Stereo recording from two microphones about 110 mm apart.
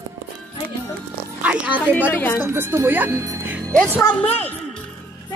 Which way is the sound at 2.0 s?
20° left (ahead or behind).